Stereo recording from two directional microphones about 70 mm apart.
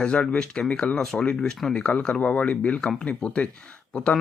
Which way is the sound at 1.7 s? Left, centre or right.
Centre.